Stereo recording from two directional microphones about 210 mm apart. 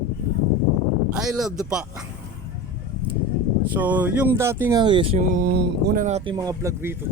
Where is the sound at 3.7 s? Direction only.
5° right (ahead or behind); by 6.0 s 50° right (ahead or behind).